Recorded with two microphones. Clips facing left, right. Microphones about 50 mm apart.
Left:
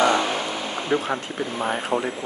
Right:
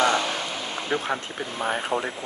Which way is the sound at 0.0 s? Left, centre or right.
Centre.